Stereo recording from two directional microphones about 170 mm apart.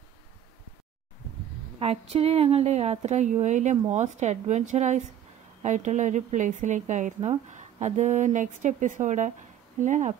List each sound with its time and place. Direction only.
1.8 s a woman's voice: 35° right (ahead or behind)